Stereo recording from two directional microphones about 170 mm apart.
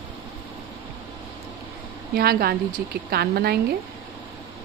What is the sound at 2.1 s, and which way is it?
A woman's voice, 65° right (ahead or behind).